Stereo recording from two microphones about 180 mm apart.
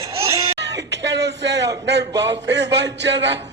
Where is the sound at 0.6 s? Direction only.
75° right (ahead or behind).